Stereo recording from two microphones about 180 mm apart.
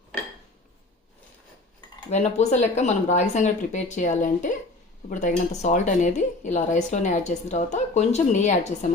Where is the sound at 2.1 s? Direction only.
40° left (ahead or behind).